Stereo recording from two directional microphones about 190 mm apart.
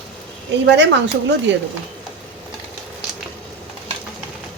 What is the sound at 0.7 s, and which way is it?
Speech, 70° right (ahead or behind).